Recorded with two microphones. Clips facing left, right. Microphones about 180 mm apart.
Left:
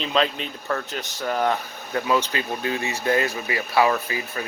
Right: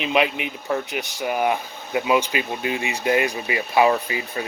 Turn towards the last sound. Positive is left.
turn(degrees=-20)  # may be behind; listen again after turning